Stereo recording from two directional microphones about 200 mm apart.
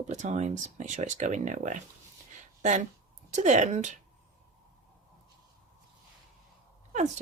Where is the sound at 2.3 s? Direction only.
40° right (ahead or behind).